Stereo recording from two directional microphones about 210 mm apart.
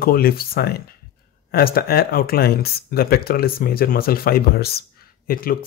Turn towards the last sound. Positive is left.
turn(degrees=45)  # may be behind; listen again after turning